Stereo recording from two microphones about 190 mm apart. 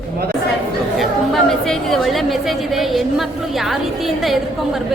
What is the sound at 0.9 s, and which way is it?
A woman's voice, centre (ahead or behind).